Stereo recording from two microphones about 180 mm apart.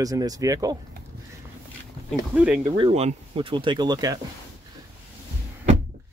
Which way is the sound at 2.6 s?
25° right (ahead or behind).